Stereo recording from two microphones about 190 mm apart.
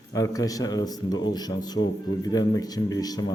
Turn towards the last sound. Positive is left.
turn(degrees=20)  # may be behind; listen again after turning